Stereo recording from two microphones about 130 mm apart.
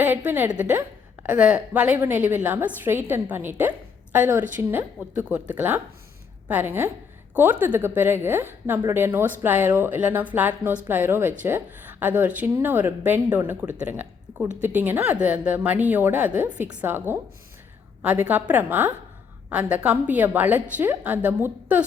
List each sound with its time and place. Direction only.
0.3 s a woman's voice: 10° right (ahead or behind)
0.8 s a sound: 20° right (ahead or behind)
1.4 s a woman's voice: 10° right (ahead or behind)